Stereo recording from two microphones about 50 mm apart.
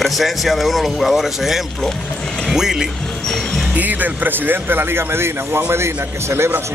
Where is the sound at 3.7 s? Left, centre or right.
Right.